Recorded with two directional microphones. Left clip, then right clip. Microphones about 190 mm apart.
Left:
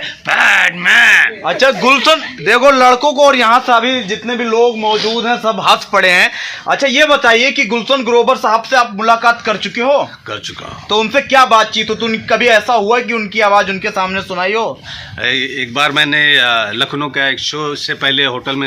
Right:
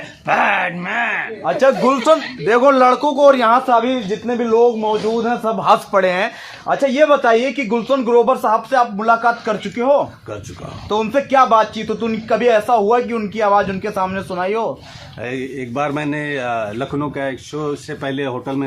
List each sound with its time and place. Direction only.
0.3 s a sound: 5° left (ahead or behind)
1.5 s speech: 25° left (ahead or behind)
15.2 s speech: centre (ahead or behind)